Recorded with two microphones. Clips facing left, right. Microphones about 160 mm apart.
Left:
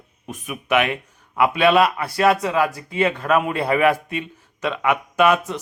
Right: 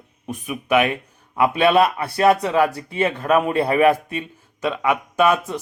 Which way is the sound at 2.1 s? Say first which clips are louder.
Right 2 dB; 30° right (ahead or behind).